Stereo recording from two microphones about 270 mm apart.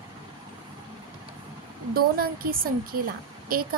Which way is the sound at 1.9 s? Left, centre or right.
Right.